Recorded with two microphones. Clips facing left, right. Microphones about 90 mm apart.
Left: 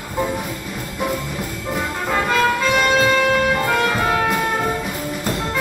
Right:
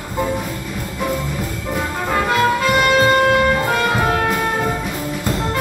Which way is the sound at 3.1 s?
40° right (ahead or behind).